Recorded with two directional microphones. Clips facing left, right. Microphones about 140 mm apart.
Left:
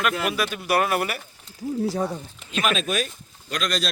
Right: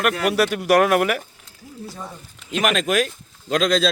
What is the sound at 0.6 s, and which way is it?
Speech, 90° right.